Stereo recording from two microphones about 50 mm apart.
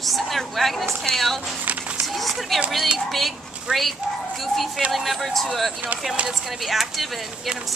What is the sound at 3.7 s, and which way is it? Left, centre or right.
Speech, right.